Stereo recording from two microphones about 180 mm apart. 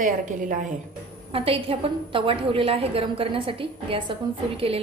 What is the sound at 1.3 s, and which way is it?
A woman's voice, 30° right (ahead or behind).